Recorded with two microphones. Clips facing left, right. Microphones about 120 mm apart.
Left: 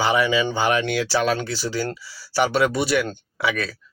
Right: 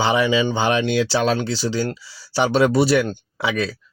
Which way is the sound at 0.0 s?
25° right (ahead or behind).